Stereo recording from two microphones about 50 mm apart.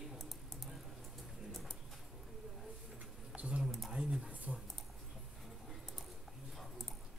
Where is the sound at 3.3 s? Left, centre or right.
Right.